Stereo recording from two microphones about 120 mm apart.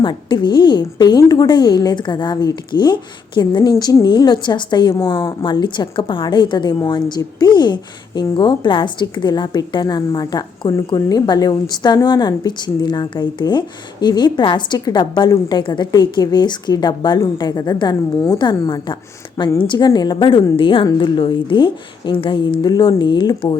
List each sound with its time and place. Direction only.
0.0 s a woman's voice: 40° left (ahead or behind)